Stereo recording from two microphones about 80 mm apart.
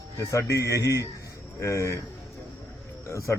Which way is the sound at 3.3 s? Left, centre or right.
Left.